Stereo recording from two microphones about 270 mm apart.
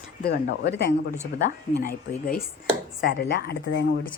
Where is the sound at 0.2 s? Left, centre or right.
Left.